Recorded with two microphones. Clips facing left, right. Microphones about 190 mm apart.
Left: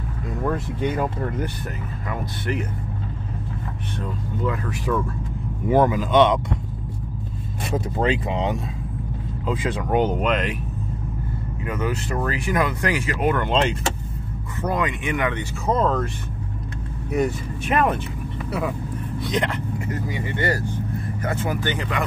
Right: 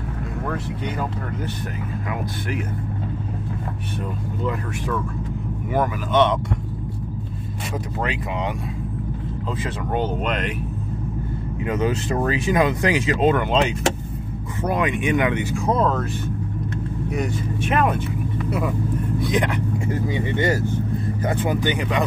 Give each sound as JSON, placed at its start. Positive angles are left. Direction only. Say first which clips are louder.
{"t": 5.7, "sound": "speech", "louder": "left 5 dB", "side_deg": 25}
{"t": 8.0, "sound": "speech", "louder": "left 4 dB", "side_deg": 25}
{"t": 9.5, "sound": "speech", "louder": "left 4 dB", "side_deg": 15}
{"t": 11.6, "sound": "speech", "louder": "right 4 dB", "side_deg": -20}
{"t": 13.4, "sound": "speech", "louder": "right 1 dB", "side_deg": -5}
{"t": 14.6, "sound": "speech", "louder": "right 2 dB", "side_deg": -15}
{"t": 19.2, "sound": "speech", "louder": "right 1 dB", "side_deg": -10}
{"t": 19.9, "sound": "speech", "louder": "right 4 dB", "side_deg": -25}